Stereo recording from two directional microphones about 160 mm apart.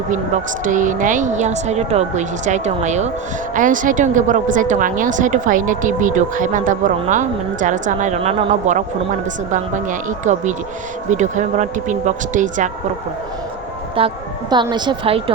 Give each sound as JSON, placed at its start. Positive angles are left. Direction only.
{"t": 0.6, "sound": "a woman's voice", "side_deg": -55}
{"t": 14.0, "sound": "a woman's voice", "side_deg": -35}